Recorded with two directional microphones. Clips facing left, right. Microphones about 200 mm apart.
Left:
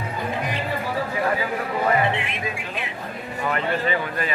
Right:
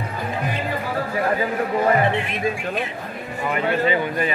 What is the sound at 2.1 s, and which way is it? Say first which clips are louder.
Speech: right 5 dB; 45° right (ahead or behind).